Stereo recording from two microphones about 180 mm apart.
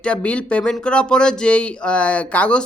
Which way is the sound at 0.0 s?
5° left (ahead or behind).